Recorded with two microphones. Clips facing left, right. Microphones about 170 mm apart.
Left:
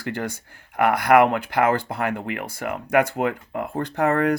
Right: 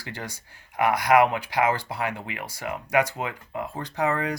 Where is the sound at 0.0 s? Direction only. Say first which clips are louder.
Left 9 dB; 55° left (ahead or behind).